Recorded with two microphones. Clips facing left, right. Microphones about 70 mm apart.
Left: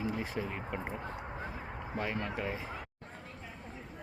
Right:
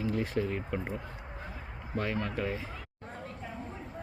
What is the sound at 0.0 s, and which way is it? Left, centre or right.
Speech, centre.